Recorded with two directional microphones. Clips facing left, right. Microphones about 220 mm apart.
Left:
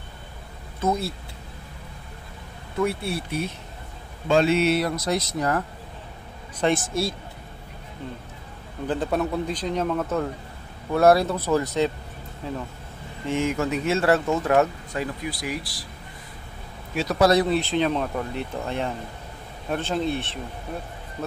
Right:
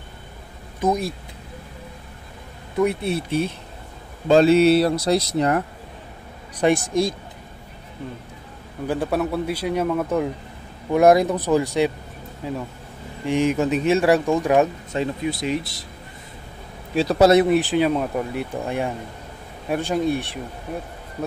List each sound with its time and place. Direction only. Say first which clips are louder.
0.7 s speech: right 3 dB; 15° right (ahead or behind)
2.8 s speech: right 4 dB; 20° right (ahead or behind)
6.6 s speech: right 4 dB; 15° right (ahead or behind)
8.8 s speech: right 2 dB; 10° right (ahead or behind)
16.9 s speech: right 5 dB; 30° right (ahead or behind); by 20.3 s 15° right (ahead or behind)